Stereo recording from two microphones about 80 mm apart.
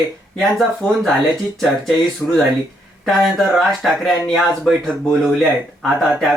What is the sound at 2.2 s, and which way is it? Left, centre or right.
Speech, left.